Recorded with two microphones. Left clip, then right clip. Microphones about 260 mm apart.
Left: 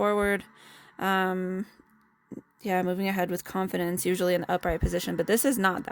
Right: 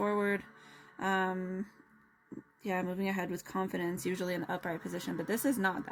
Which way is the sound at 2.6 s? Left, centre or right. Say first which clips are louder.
Left 7 dB; left.